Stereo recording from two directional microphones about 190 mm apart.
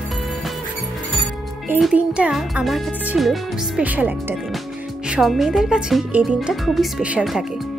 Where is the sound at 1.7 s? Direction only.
5° right (ahead or behind).